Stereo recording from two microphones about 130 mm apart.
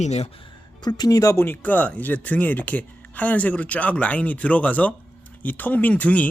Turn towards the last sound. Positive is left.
turn(degrees=10)  # may be behind; listen again after turning